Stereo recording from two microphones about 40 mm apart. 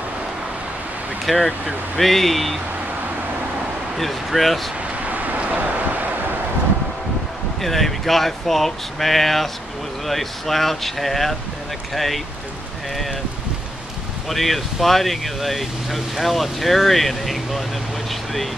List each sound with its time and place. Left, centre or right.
1.2 s speech: centre
4.0 s speech: centre
5.0 s vehicle: right
7.6 s speech: centre
14.3 s speech: centre